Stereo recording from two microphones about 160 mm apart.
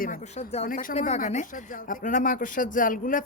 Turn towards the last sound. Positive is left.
turn(degrees=55)  # may be behind; listen again after turning